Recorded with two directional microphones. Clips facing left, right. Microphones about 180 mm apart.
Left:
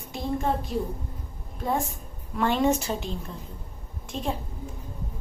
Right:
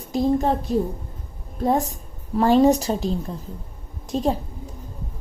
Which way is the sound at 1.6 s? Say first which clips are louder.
Right 7 dB; 40° right (ahead or behind).